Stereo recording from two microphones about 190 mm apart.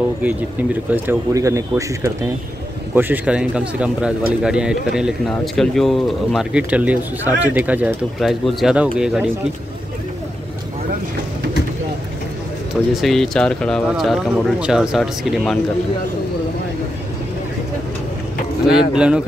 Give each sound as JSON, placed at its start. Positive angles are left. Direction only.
{"t": 0.9, "sound": "speech", "side_deg": -15}
{"t": 12.9, "sound": "speech", "side_deg": 0}
{"t": 18.7, "sound": "speech", "side_deg": -5}